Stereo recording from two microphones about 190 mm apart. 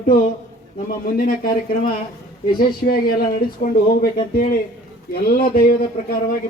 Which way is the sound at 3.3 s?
50° left (ahead or behind).